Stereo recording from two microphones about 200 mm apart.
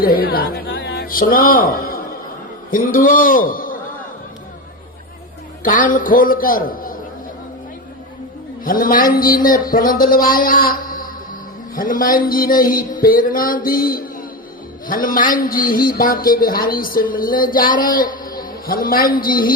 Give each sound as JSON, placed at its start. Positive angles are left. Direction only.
{"t": 0.0, "sound": "a man's voice", "side_deg": 45}
{"t": 5.6, "sound": "speech", "side_deg": 45}
{"t": 8.6, "sound": "speech", "side_deg": 45}